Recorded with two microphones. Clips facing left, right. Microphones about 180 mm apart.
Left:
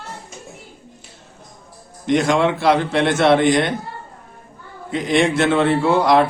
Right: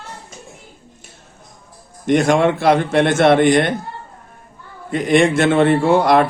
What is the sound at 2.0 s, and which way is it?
Speech, 55° right (ahead or behind).